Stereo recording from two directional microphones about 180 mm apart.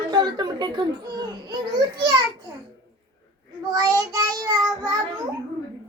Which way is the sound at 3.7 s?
20° right (ahead or behind).